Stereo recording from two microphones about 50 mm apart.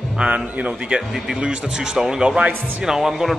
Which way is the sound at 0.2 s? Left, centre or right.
Right.